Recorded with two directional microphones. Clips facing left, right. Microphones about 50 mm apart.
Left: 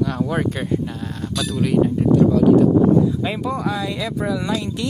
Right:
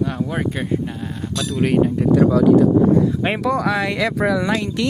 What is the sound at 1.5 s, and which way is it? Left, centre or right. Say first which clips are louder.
Speech: right 1 dB; right.